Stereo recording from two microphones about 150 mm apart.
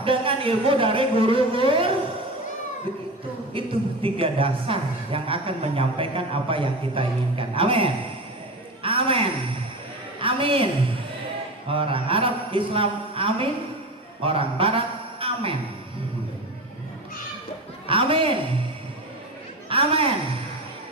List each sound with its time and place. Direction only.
0.0 s a man's voice: 35° right (ahead or behind)
3.5 s a man's voice: 35° right (ahead or behind)
8.8 s a sound: 35° right (ahead or behind)
10.2 s a man's voice: 35° right (ahead or behind)
11.7 s a man's voice: 35° right (ahead or behind)
17.8 s a man's voice: 35° right (ahead or behind)
19.6 s a man's voice: 40° right (ahead or behind)